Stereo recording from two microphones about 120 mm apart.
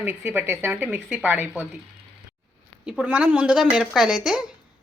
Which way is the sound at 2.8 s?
10° right (ahead or behind).